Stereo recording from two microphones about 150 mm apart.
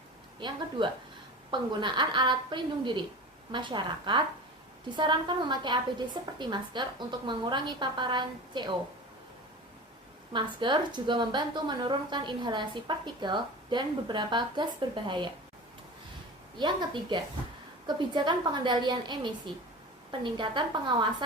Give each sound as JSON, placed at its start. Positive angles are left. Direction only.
{"t": 0.3, "sound": "a woman's voice", "side_deg": -35}
{"t": 10.3, "sound": "a woman's voice", "side_deg": -30}
{"t": 16.6, "sound": "a woman's voice", "side_deg": -30}